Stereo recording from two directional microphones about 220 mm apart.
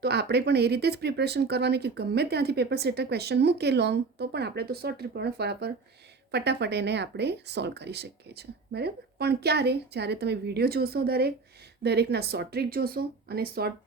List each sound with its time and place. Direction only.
0.0 s speech: 45° right (ahead or behind)